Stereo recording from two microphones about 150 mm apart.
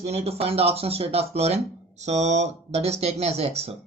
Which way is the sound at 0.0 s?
45° right (ahead or behind).